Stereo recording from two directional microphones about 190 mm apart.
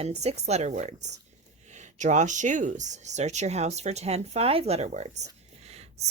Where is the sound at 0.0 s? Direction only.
35° right (ahead or behind).